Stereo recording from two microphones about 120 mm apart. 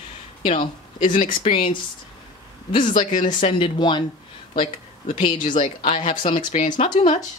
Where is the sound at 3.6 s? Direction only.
40° left (ahead or behind).